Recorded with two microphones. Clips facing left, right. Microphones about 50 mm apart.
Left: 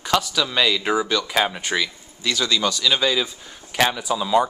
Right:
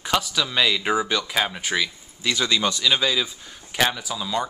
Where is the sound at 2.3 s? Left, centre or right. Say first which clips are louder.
Left 1 dB; centre.